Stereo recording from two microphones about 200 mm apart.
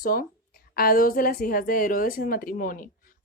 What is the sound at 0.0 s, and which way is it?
A woman's voice, 45° left (ahead or behind).